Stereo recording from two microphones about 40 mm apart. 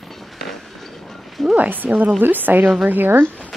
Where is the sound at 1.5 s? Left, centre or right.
Right.